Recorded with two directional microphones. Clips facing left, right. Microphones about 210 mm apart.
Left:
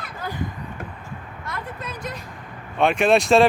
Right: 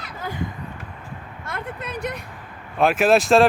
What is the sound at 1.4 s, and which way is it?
Vehicle, 55° right (ahead or behind).